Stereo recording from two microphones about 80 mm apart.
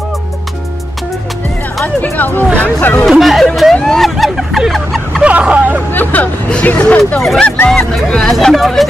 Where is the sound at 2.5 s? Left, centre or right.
Left.